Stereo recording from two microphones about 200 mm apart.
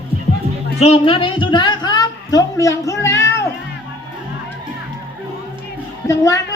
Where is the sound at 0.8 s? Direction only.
30° left (ahead or behind); by 3.5 s 15° left (ahead or behind).